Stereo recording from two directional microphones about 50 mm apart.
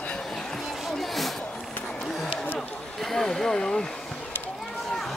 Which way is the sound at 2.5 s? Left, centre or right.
Centre.